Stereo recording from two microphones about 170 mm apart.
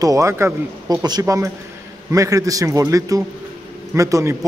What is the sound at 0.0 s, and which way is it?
A man's voice, 20° right (ahead or behind).